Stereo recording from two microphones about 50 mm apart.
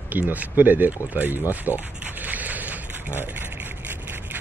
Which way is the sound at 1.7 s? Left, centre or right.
Right.